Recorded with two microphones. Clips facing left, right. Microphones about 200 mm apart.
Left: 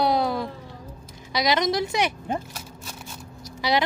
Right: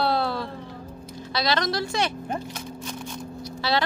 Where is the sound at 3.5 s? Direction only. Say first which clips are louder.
Left 2 dB; 15° left (ahead or behind).